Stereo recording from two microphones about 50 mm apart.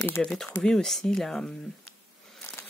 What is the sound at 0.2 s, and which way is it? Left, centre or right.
Speech, centre.